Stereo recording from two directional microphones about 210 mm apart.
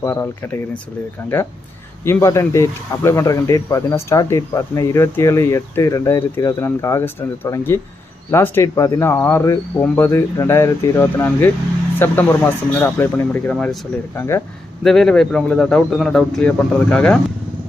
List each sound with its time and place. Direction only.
0.0 s speech: 10° left (ahead or behind)
14.8 s speech: centre (ahead or behind)